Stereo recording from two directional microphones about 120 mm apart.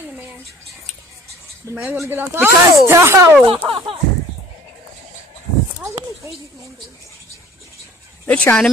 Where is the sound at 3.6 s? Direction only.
50° right (ahead or behind).